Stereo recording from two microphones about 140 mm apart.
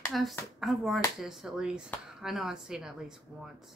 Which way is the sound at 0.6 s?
Centre (ahead or behind).